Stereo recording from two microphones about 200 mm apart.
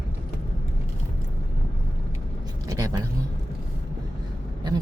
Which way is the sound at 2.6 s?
15° right (ahead or behind).